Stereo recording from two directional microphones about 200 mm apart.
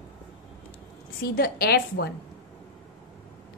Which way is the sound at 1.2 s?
50° left (ahead or behind).